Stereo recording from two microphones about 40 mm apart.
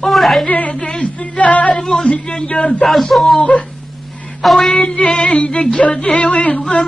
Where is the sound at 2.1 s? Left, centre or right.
Left.